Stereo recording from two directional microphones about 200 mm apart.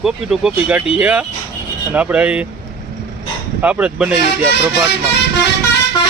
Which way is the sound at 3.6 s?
5° right (ahead or behind).